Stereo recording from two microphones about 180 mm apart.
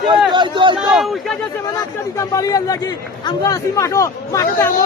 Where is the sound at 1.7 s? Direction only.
20° left (ahead or behind).